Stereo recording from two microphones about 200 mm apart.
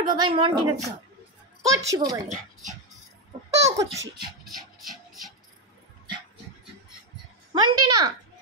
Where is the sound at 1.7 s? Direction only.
15° right (ahead or behind).